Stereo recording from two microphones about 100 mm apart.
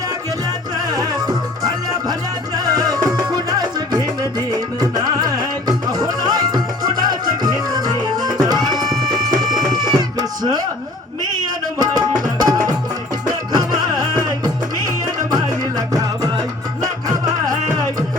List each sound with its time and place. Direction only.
0.9 s music: 40° right (ahead or behind)
2.6 s music: 40° right (ahead or behind)
11.8 s music: 40° right (ahead or behind)